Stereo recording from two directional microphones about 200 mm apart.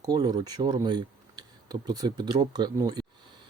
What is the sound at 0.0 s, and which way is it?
Speech, 20° right (ahead or behind).